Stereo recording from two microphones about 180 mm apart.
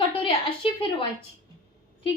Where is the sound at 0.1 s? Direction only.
30° left (ahead or behind).